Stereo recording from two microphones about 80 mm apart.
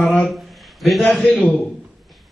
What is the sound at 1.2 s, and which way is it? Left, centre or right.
Speech, centre.